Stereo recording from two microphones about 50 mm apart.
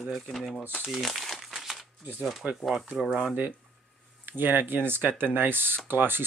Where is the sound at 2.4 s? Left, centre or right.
Right.